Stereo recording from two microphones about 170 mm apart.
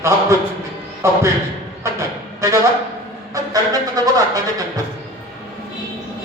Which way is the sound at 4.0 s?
20° right (ahead or behind).